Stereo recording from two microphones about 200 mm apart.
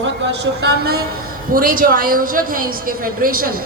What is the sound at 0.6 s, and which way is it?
A woman's voice, 55° right (ahead or behind).